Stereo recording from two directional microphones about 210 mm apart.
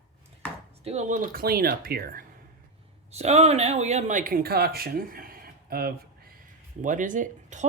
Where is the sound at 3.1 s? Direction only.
30° right (ahead or behind).